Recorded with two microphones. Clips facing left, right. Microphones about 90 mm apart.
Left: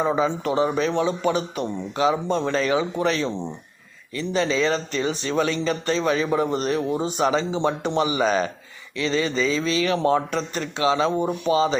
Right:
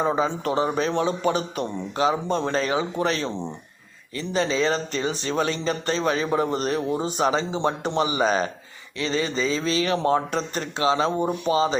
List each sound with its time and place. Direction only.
0.0 s speech: 35° right (ahead or behind)